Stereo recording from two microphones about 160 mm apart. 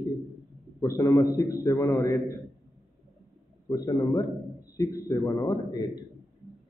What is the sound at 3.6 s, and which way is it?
A man's voice, 20° left (ahead or behind).